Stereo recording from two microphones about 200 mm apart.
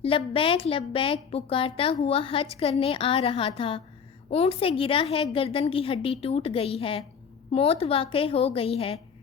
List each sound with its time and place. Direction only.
0.0 s a woman's voice: 25° left (ahead or behind)